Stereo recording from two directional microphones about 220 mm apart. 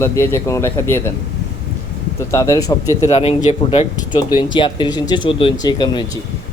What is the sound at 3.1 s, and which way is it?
Speech, 30° left (ahead or behind).